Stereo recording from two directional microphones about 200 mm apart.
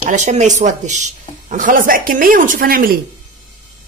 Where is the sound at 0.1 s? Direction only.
35° right (ahead or behind).